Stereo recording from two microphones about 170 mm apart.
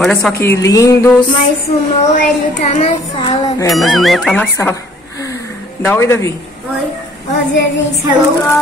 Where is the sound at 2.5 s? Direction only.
40° left (ahead or behind).